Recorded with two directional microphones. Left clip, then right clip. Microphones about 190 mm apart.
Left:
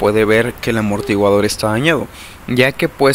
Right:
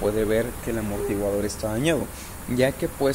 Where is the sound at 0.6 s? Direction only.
50° left (ahead or behind).